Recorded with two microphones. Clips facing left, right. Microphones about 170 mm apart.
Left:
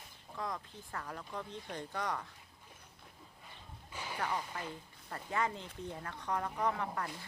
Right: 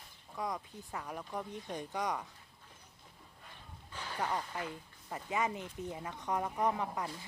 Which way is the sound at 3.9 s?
10° left (ahead or behind).